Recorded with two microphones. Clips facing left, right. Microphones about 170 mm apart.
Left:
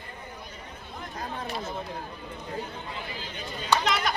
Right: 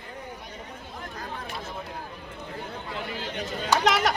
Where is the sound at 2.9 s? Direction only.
75° right (ahead or behind).